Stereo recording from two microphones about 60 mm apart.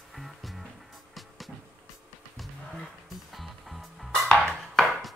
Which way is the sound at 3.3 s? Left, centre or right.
Centre.